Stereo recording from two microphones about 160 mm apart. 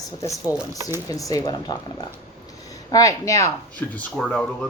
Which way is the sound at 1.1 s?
20° left (ahead or behind).